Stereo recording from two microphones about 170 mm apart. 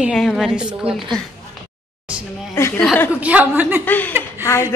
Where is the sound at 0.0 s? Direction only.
Centre (ahead or behind).